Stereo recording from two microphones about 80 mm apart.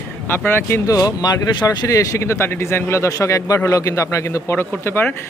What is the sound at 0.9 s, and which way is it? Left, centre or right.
A man's voice, left.